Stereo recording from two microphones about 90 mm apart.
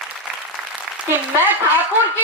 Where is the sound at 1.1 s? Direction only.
20° right (ahead or behind).